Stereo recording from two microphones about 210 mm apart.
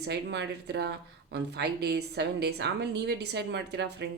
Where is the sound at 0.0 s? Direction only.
55° right (ahead or behind).